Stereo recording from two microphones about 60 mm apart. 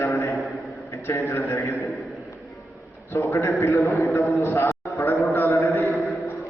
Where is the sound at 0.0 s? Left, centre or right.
Left.